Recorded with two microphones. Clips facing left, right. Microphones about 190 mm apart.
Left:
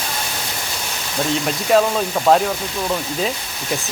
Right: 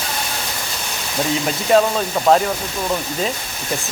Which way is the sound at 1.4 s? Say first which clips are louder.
Right 1 dB; centre (ahead or behind).